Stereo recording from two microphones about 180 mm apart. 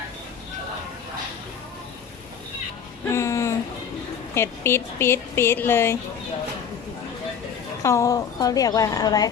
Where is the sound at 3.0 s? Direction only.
15° left (ahead or behind).